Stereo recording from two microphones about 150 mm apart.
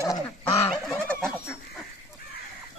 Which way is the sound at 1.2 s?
5° right (ahead or behind).